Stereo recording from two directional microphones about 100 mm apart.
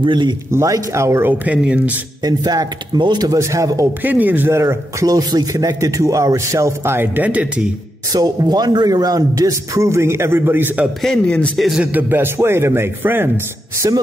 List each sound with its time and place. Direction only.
0.0 s a man's voice: 50° right (ahead or behind)
0.5 s a man's voice: 30° right (ahead or behind)
1.4 s speech: 10° right (ahead or behind)
2.2 s a man's voice: 40° right (ahead or behind)
4.0 s a man's voice: 15° right (ahead or behind)
5.0 s a man's voice: 40° right (ahead or behind); by 7.7 s 15° right (ahead or behind)
8.1 s a man's voice: 40° right (ahead or behind); by 10.9 s 20° right (ahead or behind)
11.0 s speech: 5° left (ahead or behind)
11.5 s a man's voice: centre (ahead or behind)
11.8 s a man's voice: 15° right (ahead or behind)
13.8 s a man's voice: 35° right (ahead or behind)